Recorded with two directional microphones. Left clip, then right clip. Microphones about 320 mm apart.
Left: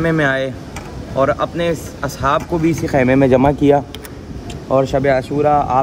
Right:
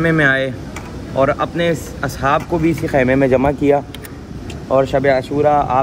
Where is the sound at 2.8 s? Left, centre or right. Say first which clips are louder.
Left 1 dB; left.